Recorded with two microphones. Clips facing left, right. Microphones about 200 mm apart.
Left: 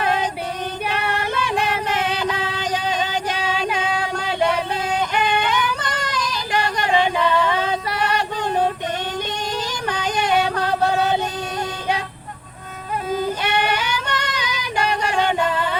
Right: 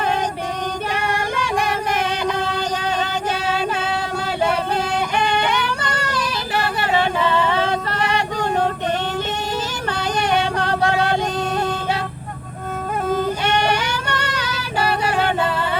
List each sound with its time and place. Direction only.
0.9 s female singing: 10° right (ahead or behind)
1.9 s music: 10° right (ahead or behind)
2.4 s music: 10° left (ahead or behind)
3.3 s female singing: 10° right (ahead or behind)
5.2 s yodeling: 10° right (ahead or behind)
5.8 s female singing: 10° right (ahead or behind)
7.0 s humming: 10° left (ahead or behind)
7.5 s a sound: 10° right (ahead or behind)
7.9 s a sound: 10° left (ahead or behind)
10.6 s music: 10° left (ahead or behind)
10.9 s music: 10° right (ahead or behind)
13.6 s a sound: 10° right (ahead or behind)
14.1 s child singing: 10° right (ahead or behind)
14.3 s female singing: 15° left (ahead or behind)